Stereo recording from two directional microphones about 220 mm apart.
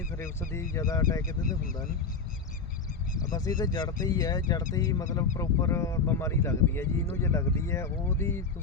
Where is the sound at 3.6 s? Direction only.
20° left (ahead or behind).